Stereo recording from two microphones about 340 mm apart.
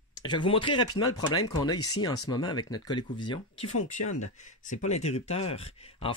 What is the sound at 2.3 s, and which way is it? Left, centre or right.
Speech, centre.